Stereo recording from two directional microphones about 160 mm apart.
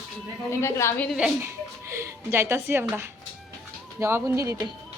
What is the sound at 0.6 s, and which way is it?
Speech, 15° left (ahead or behind).